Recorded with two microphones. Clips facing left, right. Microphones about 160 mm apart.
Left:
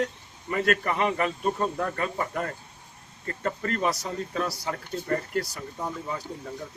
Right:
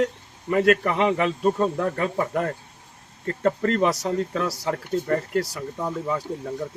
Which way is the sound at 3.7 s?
90° right.